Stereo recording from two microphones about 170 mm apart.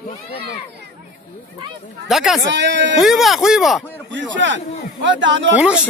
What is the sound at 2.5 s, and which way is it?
Speech, 90° right.